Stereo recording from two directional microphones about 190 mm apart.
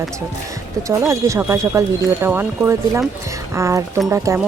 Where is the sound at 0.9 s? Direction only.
15° right (ahead or behind).